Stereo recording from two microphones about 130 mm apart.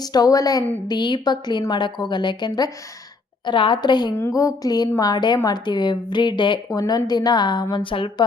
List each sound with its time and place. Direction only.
0.0 s a woman's voice: 30° left (ahead or behind)